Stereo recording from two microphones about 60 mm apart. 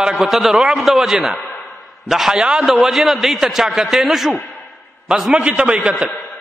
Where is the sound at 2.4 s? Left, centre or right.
Centre.